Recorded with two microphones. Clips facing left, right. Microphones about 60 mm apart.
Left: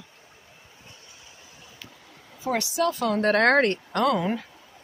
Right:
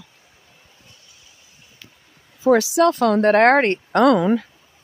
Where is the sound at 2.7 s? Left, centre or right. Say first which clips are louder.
Right 8 dB; right.